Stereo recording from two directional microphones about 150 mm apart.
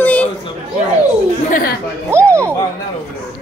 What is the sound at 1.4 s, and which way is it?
Speech, 65° left (ahead or behind).